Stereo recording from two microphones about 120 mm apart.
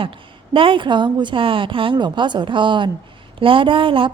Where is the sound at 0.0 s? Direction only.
45° right (ahead or behind).